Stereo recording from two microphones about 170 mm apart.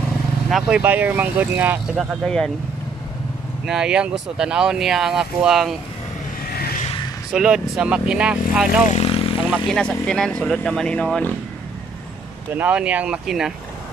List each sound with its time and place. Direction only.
0.5 s speech: 5° right (ahead or behind)
2.0 s speech: 5° left (ahead or behind)
3.6 s speech: 5° right (ahead or behind)
6.8 s a sound: 35° left (ahead or behind)
7.2 s speech: 5° right (ahead or behind)
8.9 s vehicle: 35° left (ahead or behind)
9.5 s speech: 5° left (ahead or behind)
12.5 s speech: 10° right (ahead or behind)